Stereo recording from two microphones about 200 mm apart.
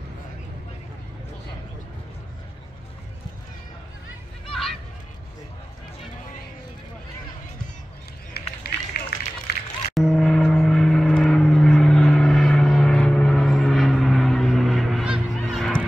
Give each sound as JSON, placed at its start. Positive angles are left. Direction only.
{"t": 4.5, "sound": "a sound", "side_deg": 0}
{"t": 8.6, "sound": "run", "side_deg": 50}
{"t": 9.5, "sound": "music", "side_deg": 55}
{"t": 9.9, "sound": "gong", "side_deg": 0}